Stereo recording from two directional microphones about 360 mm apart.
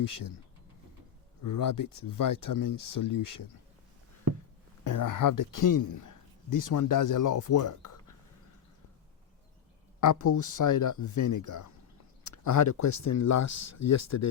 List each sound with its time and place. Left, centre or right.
0.0 s speech: left
1.4 s speech: left
4.8 s speech: left
10.0 s speech: left